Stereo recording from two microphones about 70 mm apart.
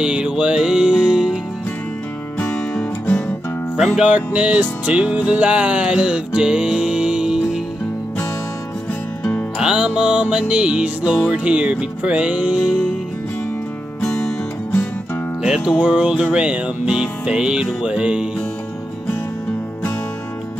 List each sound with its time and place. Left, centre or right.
0.0 s music: centre
2.4 s music: left
3.1 s music: left
3.7 s music: centre
4.0 s music: centre
9.6 s music: centre
15.4 s music: centre